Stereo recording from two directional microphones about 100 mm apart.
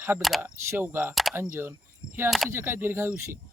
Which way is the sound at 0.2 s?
Centre (ahead or behind).